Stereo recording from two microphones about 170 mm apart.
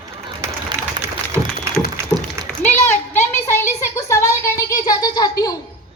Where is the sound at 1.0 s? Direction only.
15° right (ahead or behind).